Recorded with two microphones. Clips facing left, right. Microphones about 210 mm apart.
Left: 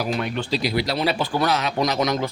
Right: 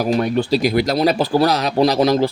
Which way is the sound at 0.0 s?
40° right (ahead or behind).